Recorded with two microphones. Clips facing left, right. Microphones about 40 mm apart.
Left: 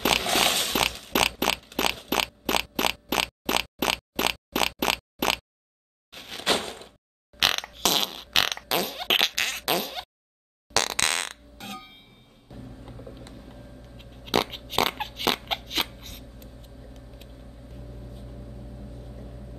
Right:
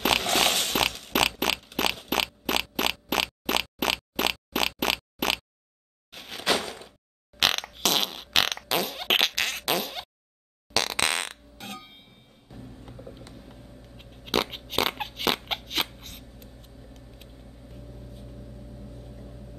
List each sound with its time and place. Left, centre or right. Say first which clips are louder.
0.0 s a sound: even; centre
6.4 s door: even; left
7.3 s fart: even; centre
12.4 s music: left 1 dB; centre
13.3 s fart: left 2 dB; centre
16.8 s vehicle: left 2 dB; centre
18.5 s vehicle: left 1 dB; left
18.9 s vehicle: left 1 dB; centre